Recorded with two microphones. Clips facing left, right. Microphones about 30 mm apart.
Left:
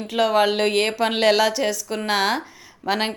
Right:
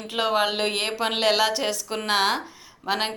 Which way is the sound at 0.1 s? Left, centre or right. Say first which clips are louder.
Left 4 dB; centre.